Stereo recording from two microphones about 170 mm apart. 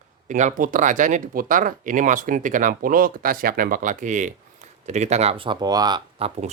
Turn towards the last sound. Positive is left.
turn(degrees=-25)  # may be behind; listen again after turning